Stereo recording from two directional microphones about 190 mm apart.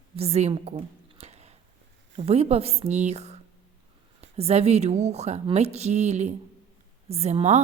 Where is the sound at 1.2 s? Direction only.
35° right (ahead or behind).